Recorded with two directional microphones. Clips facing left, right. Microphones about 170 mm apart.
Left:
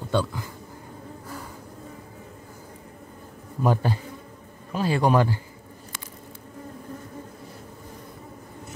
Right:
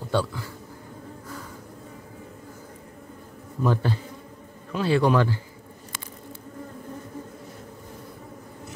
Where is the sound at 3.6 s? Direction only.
15° left (ahead or behind).